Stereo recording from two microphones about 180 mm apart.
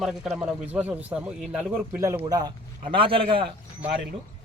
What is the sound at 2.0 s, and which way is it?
Speech, 15° right (ahead or behind).